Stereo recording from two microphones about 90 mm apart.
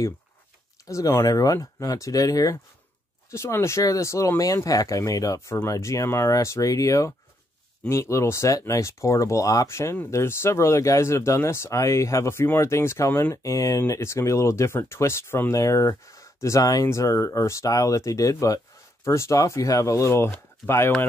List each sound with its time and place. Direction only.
0.8 s speech: 35° left (ahead or behind)